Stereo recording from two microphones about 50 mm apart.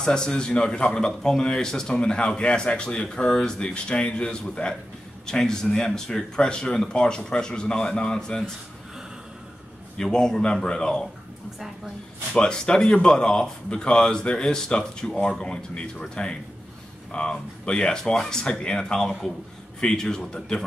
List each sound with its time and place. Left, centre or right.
0.0 s a man's voice: centre
9.9 s a man's voice: centre
12.4 s a man's voice: centre
18.1 s a man's voice: centre
18.4 s a man's voice: centre